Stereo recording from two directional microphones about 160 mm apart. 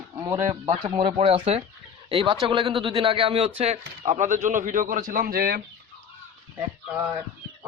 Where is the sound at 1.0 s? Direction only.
35° right (ahead or behind); by 5.6 s 70° right (ahead or behind).